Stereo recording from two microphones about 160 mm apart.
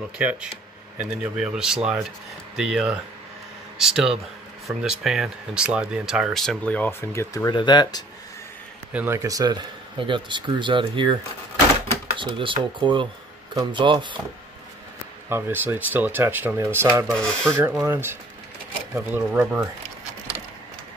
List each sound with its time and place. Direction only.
0.2 s speech: 10° right (ahead or behind); by 8.0 s 25° left (ahead or behind)
8.9 s speech: 15° right (ahead or behind); by 11.1 s 30° right (ahead or behind)
12.2 s speech: 30° right (ahead or behind)
15.2 s speech: 15° right (ahead or behind)
17.1 s speech: 5° left (ahead or behind)
17.5 s speech: 15° right (ahead or behind)